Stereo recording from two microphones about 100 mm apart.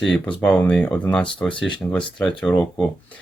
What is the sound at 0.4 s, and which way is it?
Speech, 10° left (ahead or behind).